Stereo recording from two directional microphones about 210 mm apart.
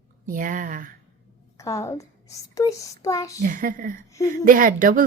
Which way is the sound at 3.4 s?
40° right (ahead or behind).